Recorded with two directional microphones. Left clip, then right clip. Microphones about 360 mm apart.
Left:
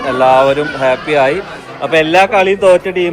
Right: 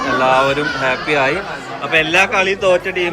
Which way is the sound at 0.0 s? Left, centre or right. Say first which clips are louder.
Left 4 dB; centre.